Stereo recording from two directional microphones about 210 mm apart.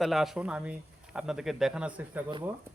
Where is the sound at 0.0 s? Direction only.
Centre (ahead or behind).